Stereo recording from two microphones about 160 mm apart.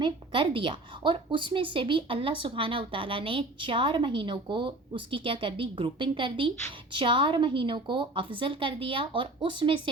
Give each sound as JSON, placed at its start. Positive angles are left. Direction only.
{"t": 0.0, "sound": "a woman's voice", "side_deg": -30}